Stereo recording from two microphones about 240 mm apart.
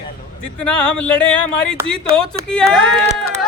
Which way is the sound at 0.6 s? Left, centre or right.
Centre.